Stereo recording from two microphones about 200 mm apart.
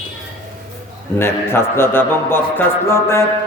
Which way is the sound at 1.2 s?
10° left (ahead or behind).